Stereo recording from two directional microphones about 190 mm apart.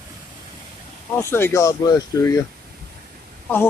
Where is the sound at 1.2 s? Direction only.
10° left (ahead or behind).